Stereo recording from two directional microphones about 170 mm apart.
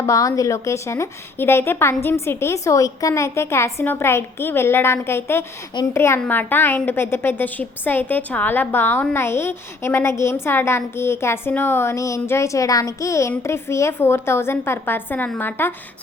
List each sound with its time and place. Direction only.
0.0 s a woman's voice: 20° left (ahead or behind)